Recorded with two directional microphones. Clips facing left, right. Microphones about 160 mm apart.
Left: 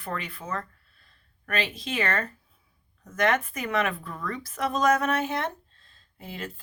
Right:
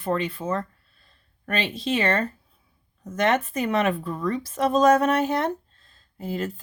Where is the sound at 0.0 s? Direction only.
30° right (ahead or behind).